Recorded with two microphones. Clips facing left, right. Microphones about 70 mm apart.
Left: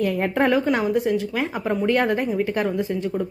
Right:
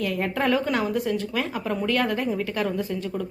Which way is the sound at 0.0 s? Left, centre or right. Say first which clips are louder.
Left 4 dB; left.